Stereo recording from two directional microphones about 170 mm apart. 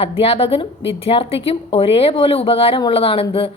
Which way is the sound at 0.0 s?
35° left (ahead or behind).